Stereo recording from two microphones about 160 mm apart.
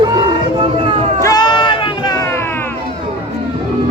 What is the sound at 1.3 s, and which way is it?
Crowd, 25° left (ahead or behind).